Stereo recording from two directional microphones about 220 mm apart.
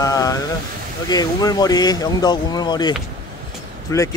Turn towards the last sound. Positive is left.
turn(degrees=15)  # may be behind; listen again after turning